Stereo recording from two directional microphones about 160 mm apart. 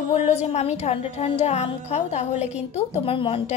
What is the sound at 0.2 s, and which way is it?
A woman's voice, 40° left (ahead or behind).